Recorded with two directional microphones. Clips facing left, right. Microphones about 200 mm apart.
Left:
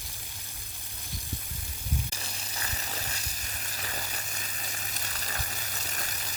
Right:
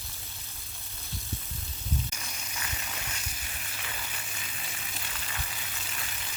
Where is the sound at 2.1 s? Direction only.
35° left (ahead or behind).